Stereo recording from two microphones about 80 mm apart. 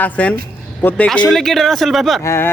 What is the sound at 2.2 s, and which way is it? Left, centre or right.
Speech, left.